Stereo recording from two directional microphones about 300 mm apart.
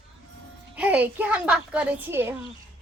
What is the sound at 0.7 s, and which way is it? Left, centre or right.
A woman's voice, centre.